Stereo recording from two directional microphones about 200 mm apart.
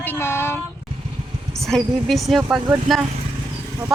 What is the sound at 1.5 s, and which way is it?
Speech, centre (ahead or behind).